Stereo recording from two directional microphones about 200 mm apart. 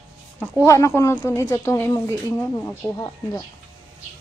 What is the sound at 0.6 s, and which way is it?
A woman's voice, 15° left (ahead or behind).